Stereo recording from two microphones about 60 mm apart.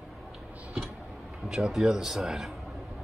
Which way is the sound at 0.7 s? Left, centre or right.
Centre.